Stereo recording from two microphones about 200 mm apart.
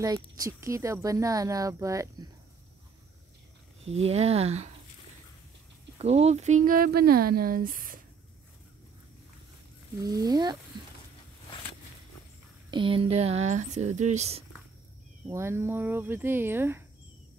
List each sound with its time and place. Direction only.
0.0 s speech: 15° right (ahead or behind)
3.8 s speech: 30° right (ahead or behind)
5.9 s speech: 30° right (ahead or behind)
9.9 s speech: 15° right (ahead or behind)
12.7 s speech: 25° right (ahead or behind)
15.2 s speech: 15° right (ahead or behind)